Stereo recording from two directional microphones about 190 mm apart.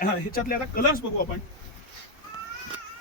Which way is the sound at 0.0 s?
50° left (ahead or behind).